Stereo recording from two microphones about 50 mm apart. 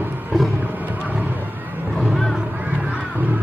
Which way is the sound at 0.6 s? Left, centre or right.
Right.